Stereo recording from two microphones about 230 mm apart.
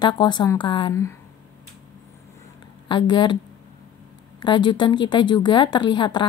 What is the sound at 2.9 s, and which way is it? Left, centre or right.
Speech, centre.